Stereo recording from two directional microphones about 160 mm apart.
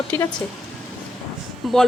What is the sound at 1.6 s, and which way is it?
Speech, centre (ahead or behind).